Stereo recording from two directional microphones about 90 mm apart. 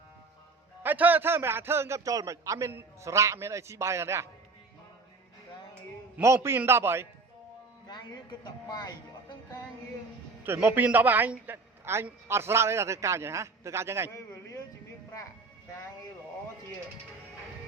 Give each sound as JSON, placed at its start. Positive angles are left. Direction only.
{"t": 0.8, "sound": "a man's voice", "side_deg": -20}
{"t": 6.2, "sound": "a man's voice", "side_deg": -30}
{"t": 7.9, "sound": "speech", "side_deg": 55}
{"t": 10.4, "sound": "a man's voice", "side_deg": -20}